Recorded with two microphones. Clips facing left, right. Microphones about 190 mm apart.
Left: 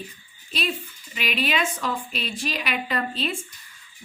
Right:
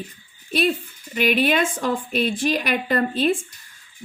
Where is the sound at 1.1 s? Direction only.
50° right (ahead or behind).